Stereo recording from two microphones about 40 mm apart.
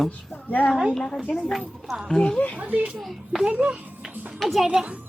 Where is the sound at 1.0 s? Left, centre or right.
Centre.